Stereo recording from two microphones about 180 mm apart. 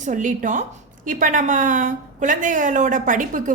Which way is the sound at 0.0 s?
45° right (ahead or behind).